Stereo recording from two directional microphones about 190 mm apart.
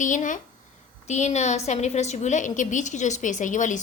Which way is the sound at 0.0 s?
40° left (ahead or behind).